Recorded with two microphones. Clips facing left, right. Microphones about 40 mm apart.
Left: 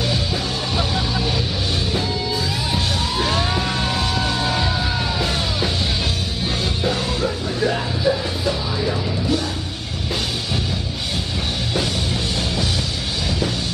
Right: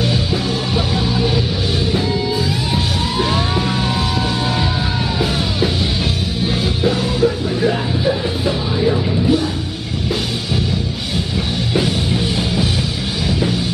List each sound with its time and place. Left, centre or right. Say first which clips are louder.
0.7 s music: right 3 dB; centre
2.7 s music: right 3 dB; centre
6.4 s music: right 5 dB; centre
8.0 s music: right 2 dB; centre
11.7 s music: right 6 dB; centre